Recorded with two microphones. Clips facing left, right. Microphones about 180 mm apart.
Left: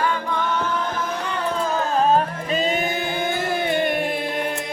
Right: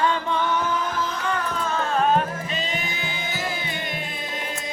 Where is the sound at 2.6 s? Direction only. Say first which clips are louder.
Left 8 dB; 55° left (ahead or behind).